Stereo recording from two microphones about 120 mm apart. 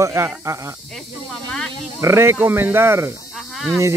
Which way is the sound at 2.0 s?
20° right (ahead or behind).